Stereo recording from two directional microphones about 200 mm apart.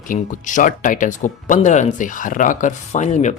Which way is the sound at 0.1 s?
40° left (ahead or behind).